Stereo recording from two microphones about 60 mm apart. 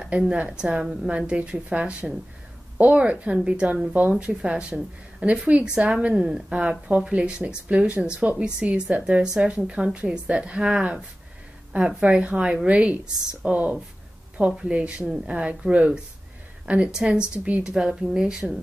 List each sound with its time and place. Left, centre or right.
0.2 s a woman's voice: centre